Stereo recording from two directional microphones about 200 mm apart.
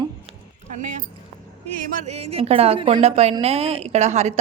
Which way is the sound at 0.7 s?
40° right (ahead or behind).